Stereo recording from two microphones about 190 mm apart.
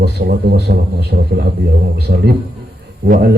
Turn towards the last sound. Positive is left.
turn(degrees=-55)  # may be behind; listen again after turning